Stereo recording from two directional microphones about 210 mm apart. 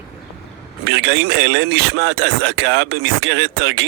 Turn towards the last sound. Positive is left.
turn(degrees=-55)  # may be behind; listen again after turning